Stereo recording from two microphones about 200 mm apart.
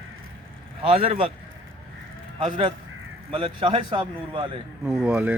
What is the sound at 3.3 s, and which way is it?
Speech, 25° right (ahead or behind).